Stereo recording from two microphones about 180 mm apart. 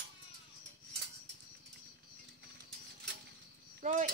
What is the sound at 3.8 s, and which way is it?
Speech, 45° right (ahead or behind).